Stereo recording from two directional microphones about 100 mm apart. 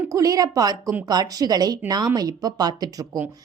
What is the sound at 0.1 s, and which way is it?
A woman's voice, 35° right (ahead or behind).